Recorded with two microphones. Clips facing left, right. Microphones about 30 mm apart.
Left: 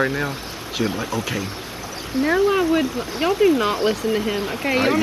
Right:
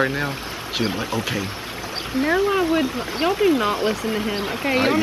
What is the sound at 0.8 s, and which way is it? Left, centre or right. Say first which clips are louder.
Speech: left 1 dB; right.